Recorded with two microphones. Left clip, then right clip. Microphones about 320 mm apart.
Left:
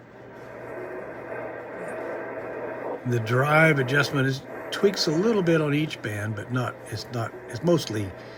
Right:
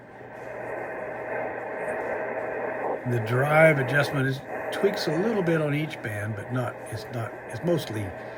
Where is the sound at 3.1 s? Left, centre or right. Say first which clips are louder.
Left 3 dB; centre.